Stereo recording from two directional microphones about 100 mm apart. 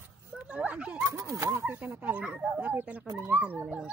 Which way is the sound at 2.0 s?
15° right (ahead or behind).